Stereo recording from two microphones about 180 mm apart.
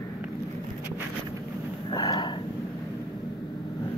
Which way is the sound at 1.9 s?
20° left (ahead or behind).